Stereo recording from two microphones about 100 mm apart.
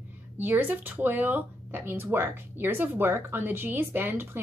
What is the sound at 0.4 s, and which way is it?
Speech, 20° right (ahead or behind).